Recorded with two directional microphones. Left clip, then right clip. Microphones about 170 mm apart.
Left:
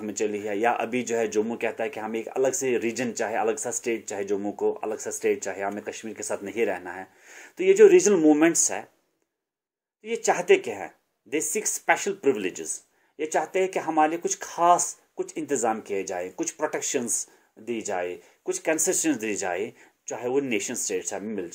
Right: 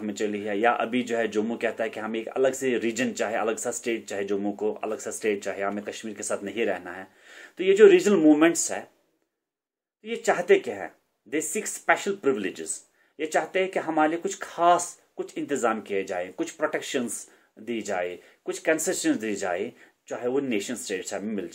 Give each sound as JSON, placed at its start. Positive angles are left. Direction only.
{"t": 0.2, "sound": "speech", "side_deg": 35}
{"t": 10.0, "sound": "speech", "side_deg": 35}
{"t": 13.5, "sound": "speech", "side_deg": 35}
{"t": 17.6, "sound": "speech", "side_deg": 25}